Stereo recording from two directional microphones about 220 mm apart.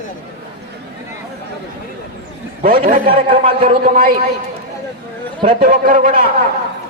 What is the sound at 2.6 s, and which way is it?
Speech, 40° right (ahead or behind).